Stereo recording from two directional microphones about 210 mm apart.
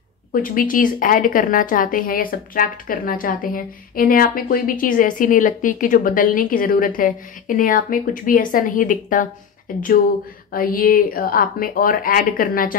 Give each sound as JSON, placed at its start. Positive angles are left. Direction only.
{"t": 0.3, "sound": "a woman's voice", "side_deg": 40}